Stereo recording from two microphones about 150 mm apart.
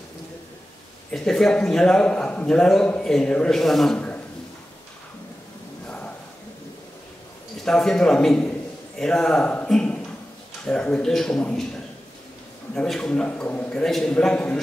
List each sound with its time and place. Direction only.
1.1 s a man's voice: 5° left (ahead or behind)
5.9 s a sound: 10° left (ahead or behind)
7.6 s a man's voice: 5° left (ahead or behind)
12.7 s a man's voice: 5° left (ahead or behind)